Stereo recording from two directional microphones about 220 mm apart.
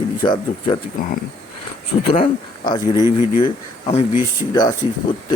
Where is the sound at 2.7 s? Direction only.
20° left (ahead or behind).